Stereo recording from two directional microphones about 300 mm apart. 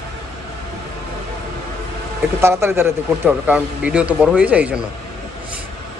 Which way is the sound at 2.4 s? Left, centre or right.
Centre.